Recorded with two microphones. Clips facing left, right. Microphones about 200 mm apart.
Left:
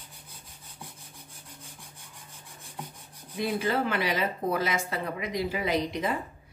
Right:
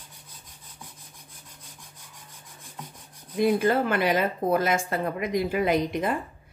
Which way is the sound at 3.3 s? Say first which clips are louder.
Right 6 dB; 50° right (ahead or behind).